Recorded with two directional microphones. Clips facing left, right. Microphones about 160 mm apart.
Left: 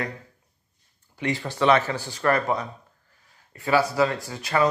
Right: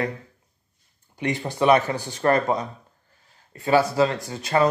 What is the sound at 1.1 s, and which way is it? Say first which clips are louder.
Speech: right 1 dB; 20° right (ahead or behind).